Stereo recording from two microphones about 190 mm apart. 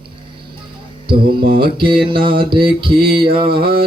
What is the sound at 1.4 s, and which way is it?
Mantra, 50° right (ahead or behind).